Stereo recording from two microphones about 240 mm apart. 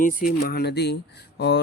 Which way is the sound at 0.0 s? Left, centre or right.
Left.